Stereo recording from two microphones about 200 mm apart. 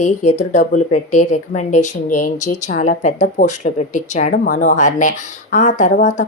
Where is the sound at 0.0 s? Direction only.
35° left (ahead or behind).